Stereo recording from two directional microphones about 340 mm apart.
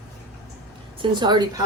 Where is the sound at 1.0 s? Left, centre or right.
Centre.